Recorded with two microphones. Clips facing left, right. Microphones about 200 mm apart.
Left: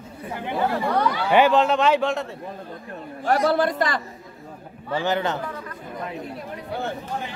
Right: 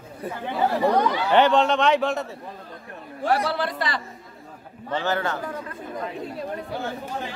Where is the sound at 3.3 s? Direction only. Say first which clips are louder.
Left 4 dB; 45° left (ahead or behind).